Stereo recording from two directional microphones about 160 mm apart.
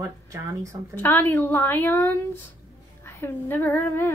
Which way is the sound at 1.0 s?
10° left (ahead or behind).